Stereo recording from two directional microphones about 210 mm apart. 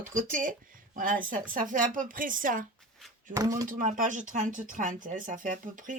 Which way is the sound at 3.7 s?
40° right (ahead or behind).